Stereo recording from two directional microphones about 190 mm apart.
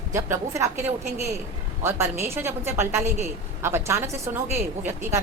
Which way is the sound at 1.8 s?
15° right (ahead or behind).